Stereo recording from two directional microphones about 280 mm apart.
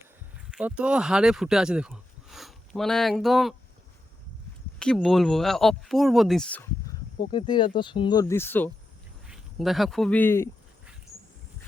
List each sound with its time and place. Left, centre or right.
0.5 s speech: centre
4.8 s speech: centre
7.3 s speech: centre